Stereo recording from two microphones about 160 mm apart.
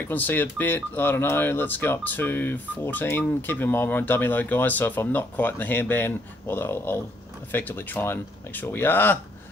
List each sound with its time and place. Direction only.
0.1 s speech: 10° left (ahead or behind)